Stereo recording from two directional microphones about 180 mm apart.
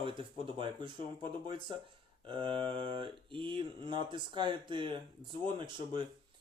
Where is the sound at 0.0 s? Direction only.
30° right (ahead or behind).